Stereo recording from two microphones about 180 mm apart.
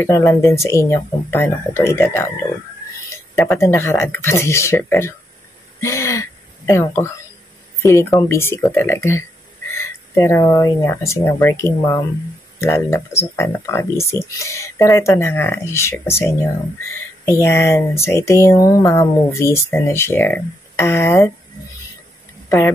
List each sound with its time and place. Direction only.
0.0 s speech: 15° left (ahead or behind)
3.4 s speech: 15° left (ahead or behind)
5.8 s a sound: 15° left (ahead or behind)
7.8 s speech: 15° left (ahead or behind)